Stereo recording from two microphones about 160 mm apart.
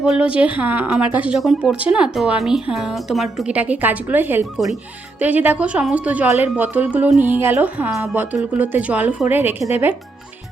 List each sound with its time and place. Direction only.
0.0 s speech: 5° right (ahead or behind)